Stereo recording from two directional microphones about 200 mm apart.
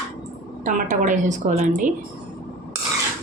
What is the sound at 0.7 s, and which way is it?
A woman's voice, 40° right (ahead or behind).